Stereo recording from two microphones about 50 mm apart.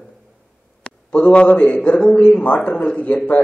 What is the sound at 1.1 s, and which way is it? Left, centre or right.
Speech, left.